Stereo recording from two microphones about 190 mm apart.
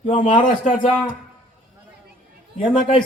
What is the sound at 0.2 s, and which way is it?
Speech, 45° left (ahead or behind).